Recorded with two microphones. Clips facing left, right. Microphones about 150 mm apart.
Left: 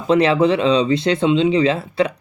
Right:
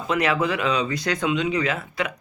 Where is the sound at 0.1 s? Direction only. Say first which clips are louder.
Left 8 dB; 30° left (ahead or behind).